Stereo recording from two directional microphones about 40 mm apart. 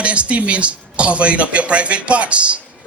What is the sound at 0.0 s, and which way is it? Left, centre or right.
Speech, right.